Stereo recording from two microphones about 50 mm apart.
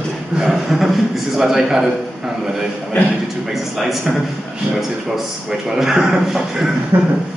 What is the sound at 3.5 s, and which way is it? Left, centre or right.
Speech, centre.